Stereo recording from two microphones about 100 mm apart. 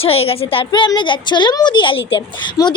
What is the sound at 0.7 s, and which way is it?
A woman's voice, 50° left (ahead or behind).